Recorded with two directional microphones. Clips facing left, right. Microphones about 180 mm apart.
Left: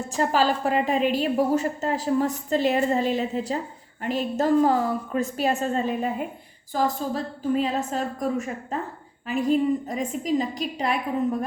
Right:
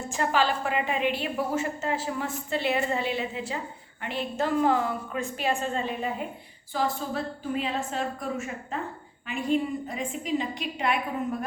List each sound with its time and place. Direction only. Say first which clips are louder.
0.1 s a woman's voice: left 3 dB; 40° left (ahead or behind)